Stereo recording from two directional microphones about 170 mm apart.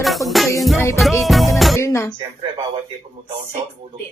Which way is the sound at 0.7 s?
15° left (ahead or behind).